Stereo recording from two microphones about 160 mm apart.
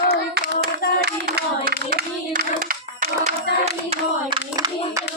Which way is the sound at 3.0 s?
45° right (ahead or behind).